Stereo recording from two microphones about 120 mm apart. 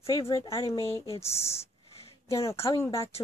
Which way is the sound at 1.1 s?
60° left (ahead or behind).